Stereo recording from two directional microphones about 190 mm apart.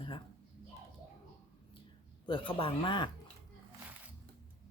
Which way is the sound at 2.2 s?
25° left (ahead or behind).